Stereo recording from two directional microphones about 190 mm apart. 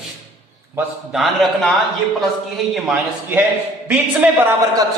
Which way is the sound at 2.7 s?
5° right (ahead or behind).